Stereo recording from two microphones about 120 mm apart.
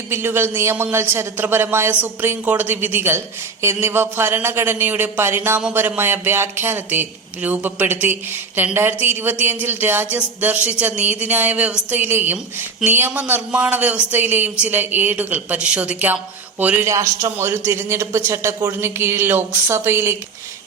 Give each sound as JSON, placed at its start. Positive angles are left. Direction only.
{"t": 0.1, "sound": "a man's voice", "side_deg": -20}
{"t": 16.8, "sound": "a man's voice", "side_deg": -25}